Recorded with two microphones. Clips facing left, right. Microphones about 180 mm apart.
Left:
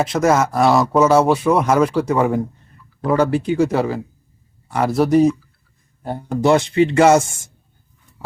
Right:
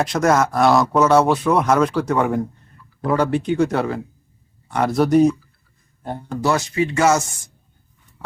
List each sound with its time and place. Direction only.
0.0 s speech: 5° left (ahead or behind)
6.4 s speech: 25° left (ahead or behind)